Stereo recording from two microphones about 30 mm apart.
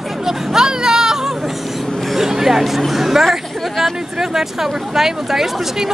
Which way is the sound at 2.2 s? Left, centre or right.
Centre.